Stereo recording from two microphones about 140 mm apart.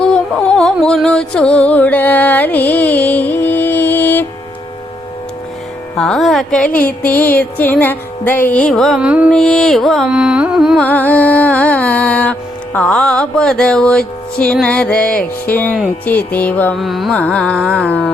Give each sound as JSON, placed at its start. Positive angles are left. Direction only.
{"t": 0.0, "sound": "music", "side_deg": 5}
{"t": 6.0, "sound": "speech", "side_deg": 0}
{"t": 9.0, "sound": "music", "side_deg": -10}
{"t": 9.3, "sound": "carnatic music", "side_deg": 5}
{"t": 10.8, "sound": "music", "side_deg": 10}
{"t": 14.3, "sound": "speech", "side_deg": 5}
{"t": 16.7, "sound": "carnatic music", "side_deg": 0}
{"t": 17.2, "sound": "speech", "side_deg": 10}